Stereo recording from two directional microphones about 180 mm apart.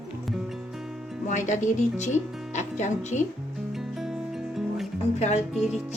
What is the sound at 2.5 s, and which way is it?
Music, 40° left (ahead or behind).